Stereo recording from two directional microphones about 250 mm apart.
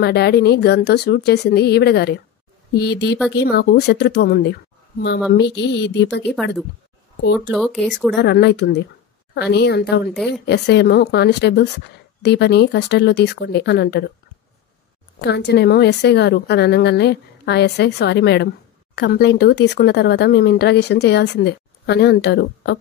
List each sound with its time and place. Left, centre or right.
0.0 s speech: left
5.3 s a sound: left
7.5 s speech: centre
8.2 s a sound: left
9.3 s speech: left
15.1 s speech: left